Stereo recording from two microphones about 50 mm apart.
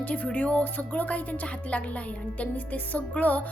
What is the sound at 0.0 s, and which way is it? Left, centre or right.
Speech, left.